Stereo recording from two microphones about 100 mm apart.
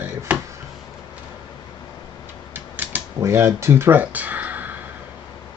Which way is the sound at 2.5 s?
20° right (ahead or behind).